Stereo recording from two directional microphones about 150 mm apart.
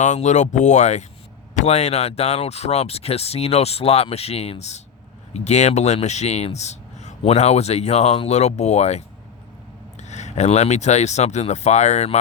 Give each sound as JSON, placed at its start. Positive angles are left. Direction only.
{"t": 0.0, "sound": "speech", "side_deg": 55}